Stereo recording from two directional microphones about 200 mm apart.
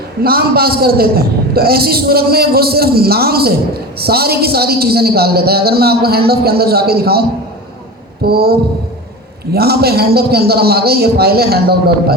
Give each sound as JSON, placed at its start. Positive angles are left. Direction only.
{"t": 0.2, "sound": "a man's voice", "side_deg": -50}